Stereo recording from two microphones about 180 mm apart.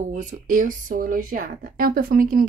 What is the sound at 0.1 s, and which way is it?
Speech, 45° right (ahead or behind).